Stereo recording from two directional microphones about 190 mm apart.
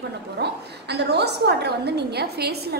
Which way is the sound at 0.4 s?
60° right (ahead or behind).